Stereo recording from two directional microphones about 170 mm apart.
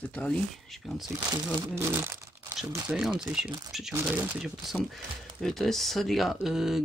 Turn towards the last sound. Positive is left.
turn(degrees=0)  # may be behind; listen again after turning